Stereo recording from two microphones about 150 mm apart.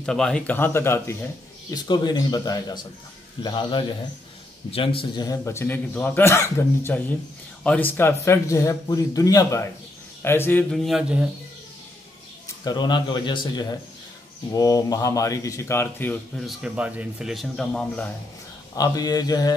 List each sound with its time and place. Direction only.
0.0 s a man's voice: 5° left (ahead or behind)
1.7 s a man's voice: 25° left (ahead or behind)
10.7 s speech: centre (ahead or behind)
12.6 s speech: 30° left (ahead or behind)
16.3 s speech: 5° right (ahead or behind)
18.8 s speech: 25° left (ahead or behind)